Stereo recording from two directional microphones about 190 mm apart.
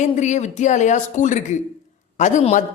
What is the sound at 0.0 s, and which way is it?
A man's voice, 40° left (ahead or behind).